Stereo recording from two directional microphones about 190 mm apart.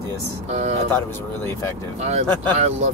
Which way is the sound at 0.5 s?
35° right (ahead or behind).